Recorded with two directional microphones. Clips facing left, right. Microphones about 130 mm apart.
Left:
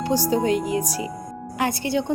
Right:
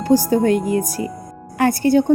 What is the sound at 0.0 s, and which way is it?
A woman's voice, 45° right (ahead or behind).